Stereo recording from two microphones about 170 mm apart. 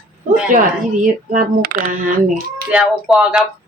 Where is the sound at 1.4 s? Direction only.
55° right (ahead or behind).